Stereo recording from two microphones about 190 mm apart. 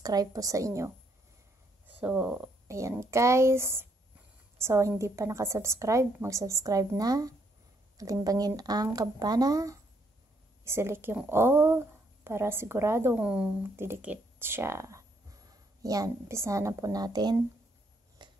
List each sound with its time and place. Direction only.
0.0 s a woman's voice: 20° right (ahead or behind)
2.0 s a woman's voice: 5° right (ahead or behind)
18.2 s a sound: 25° right (ahead or behind)